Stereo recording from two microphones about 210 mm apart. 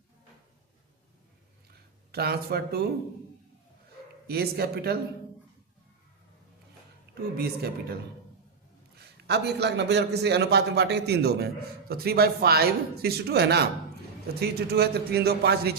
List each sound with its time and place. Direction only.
2.1 s a man's voice: 50° right (ahead or behind)
4.3 s a man's voice: 50° right (ahead or behind)
7.2 s a man's voice: 45° right (ahead or behind)
9.2 s a man's voice: 50° right (ahead or behind)